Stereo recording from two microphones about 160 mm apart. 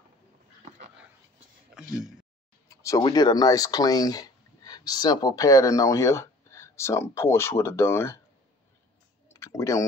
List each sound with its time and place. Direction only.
1.7 s a sound: 5° right (ahead or behind)
2.7 s speech: 20° left (ahead or behind)
9.3 s speech: 20° left (ahead or behind)